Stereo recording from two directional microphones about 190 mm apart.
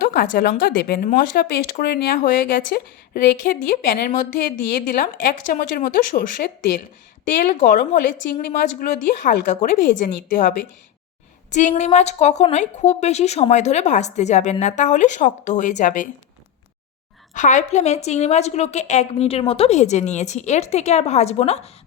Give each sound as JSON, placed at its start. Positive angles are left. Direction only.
{"t": 0.1, "sound": "speech", "side_deg": 50}
{"t": 11.5, "sound": "speech", "side_deg": 40}
{"t": 17.3, "sound": "speech", "side_deg": 40}